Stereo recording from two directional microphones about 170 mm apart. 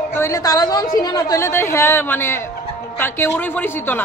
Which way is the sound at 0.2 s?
20° left (ahead or behind).